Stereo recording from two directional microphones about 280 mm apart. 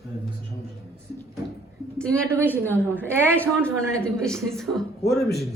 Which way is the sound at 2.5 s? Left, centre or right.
Centre.